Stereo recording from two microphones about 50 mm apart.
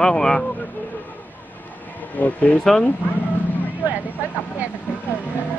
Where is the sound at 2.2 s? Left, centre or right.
Left.